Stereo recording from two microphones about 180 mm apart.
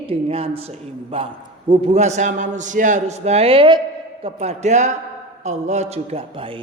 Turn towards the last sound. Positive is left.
turn(degrees=-35)  # may be behind; listen again after turning